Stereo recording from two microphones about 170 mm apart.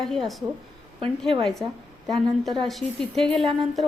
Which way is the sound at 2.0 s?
Centre (ahead or behind).